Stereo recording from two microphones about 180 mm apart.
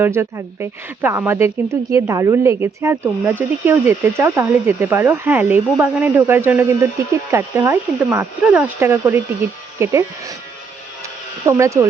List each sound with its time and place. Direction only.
0.0 s speech: 15° right (ahead or behind)
11.4 s speech: 15° right (ahead or behind)